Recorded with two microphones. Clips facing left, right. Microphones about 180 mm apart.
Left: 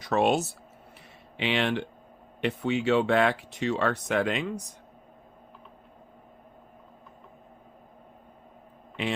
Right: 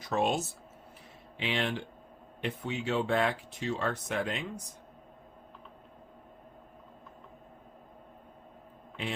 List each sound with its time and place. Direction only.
0.0 s speech: 75° left (ahead or behind)